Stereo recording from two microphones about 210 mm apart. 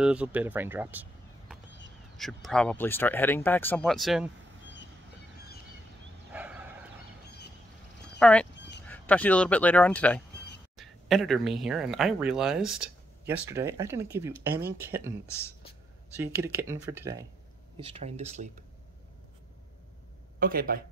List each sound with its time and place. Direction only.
0.0 s speech: 5° right (ahead or behind)
2.1 s speech: centre (ahead or behind)
6.3 s bow-wow: 5° right (ahead or behind)
8.2 s speech: 5° left (ahead or behind)
8.5 s a sound: 55° left (ahead or behind)
8.8 s speech: 10° left (ahead or behind); by 15.1 s 10° right (ahead or behind)
16.2 s speech: 10° right (ahead or behind)
17.7 s speech: 25° right (ahead or behind)
20.3 s speech: 45° right (ahead or behind)